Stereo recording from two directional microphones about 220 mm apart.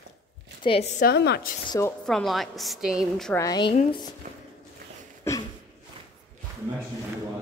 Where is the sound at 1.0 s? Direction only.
45° left (ahead or behind).